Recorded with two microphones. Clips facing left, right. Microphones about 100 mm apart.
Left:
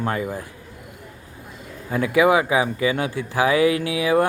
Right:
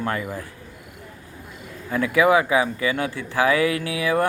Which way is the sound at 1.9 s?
25° left (ahead or behind).